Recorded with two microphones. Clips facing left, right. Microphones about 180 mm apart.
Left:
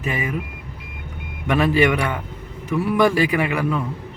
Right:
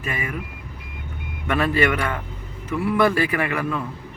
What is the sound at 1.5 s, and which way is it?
Speech, 15° left (ahead or behind).